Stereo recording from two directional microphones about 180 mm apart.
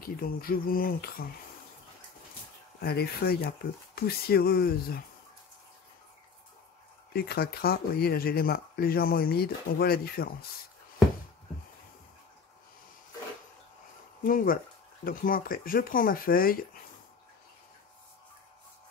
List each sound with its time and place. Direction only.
0.0 s speech: 55° left (ahead or behind)
2.8 s speech: 60° left (ahead or behind)
7.2 s speech: 60° left (ahead or behind)
14.2 s speech: 50° left (ahead or behind)